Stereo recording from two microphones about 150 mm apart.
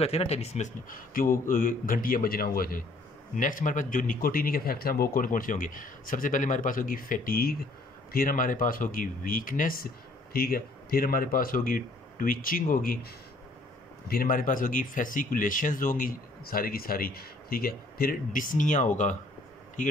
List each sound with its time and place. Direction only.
0.0 s speech: 40° left (ahead or behind)
0.8 s speech: 70° left (ahead or behind)
3.3 s speech: 60° left (ahead or behind)
10.3 s speech: 90° left; by 13.0 s 65° left (ahead or behind)
14.0 s speech: 80° left; by 18.9 s 55° left (ahead or behind)